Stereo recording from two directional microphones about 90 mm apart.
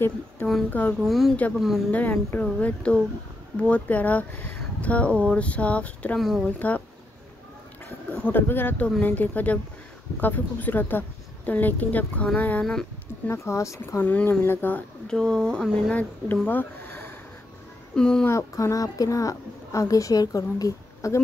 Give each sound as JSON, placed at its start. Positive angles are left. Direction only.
{"t": 0.7, "sound": "speech", "side_deg": 15}
{"t": 0.9, "sound": "speech", "side_deg": 0}
{"t": 1.9, "sound": "a woman's voice", "side_deg": 20}
{"t": 6.1, "sound": "speech", "side_deg": 0}
{"t": 6.4, "sound": "speech", "side_deg": 15}
{"t": 8.1, "sound": "a woman's voice", "side_deg": 20}
{"t": 13.3, "sound": "a woman's voice", "side_deg": 35}
{"t": 14.0, "sound": "a woman's voice", "side_deg": 15}
{"t": 15.0, "sound": "speech", "side_deg": 5}
{"t": 16.0, "sound": "speech", "side_deg": 20}
{"t": 17.9, "sound": "speech", "side_deg": 10}
{"t": 18.2, "sound": "a woman's voice", "side_deg": 35}